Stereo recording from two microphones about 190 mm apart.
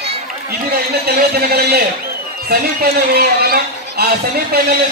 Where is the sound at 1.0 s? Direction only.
55° right (ahead or behind).